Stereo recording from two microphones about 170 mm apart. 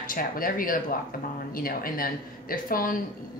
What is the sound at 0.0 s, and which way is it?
A woman's voice, 55° left (ahead or behind).